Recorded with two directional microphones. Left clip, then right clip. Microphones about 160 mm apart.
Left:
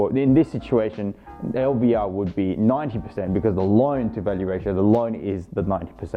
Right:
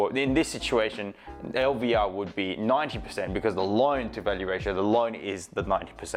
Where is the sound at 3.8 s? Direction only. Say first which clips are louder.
Left 3 dB; 10° right (ahead or behind).